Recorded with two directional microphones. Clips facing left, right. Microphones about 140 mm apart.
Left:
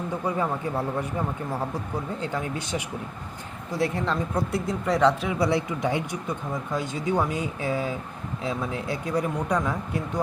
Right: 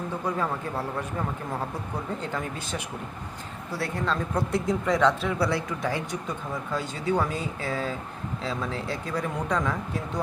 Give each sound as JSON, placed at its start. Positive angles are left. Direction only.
{"t": 3.8, "sound": "speech", "side_deg": 20}
{"t": 4.4, "sound": "speech", "side_deg": 5}